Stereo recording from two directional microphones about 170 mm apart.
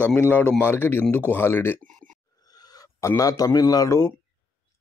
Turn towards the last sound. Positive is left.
turn(degrees=15)  # may be behind; listen again after turning